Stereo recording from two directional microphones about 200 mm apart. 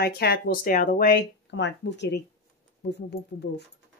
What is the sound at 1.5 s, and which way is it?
Speech, 60° left (ahead or behind).